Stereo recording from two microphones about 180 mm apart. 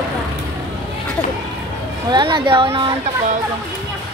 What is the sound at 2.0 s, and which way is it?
Speech, 25° right (ahead or behind).